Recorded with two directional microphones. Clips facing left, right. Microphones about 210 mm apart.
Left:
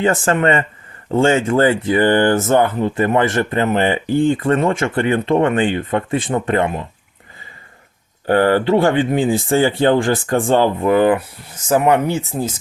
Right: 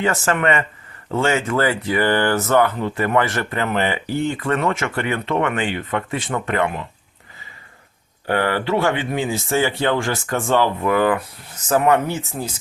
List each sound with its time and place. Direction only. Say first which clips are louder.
0.0 s speech: left 4 dB; 30° left (ahead or behind)
8.3 s speech: left 6 dB; 35° left (ahead or behind)
11.5 s speech: left 2 dB; 10° left (ahead or behind)